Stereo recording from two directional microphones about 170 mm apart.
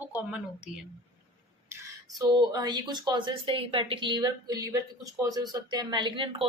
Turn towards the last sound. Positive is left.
turn(degrees=-30)  # may be behind; listen again after turning